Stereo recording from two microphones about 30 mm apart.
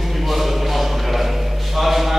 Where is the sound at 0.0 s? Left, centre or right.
Centre.